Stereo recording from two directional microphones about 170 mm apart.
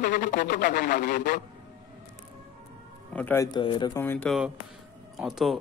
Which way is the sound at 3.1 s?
10° left (ahead or behind).